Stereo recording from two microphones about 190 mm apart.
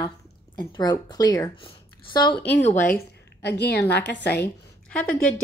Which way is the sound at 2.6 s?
40° left (ahead or behind).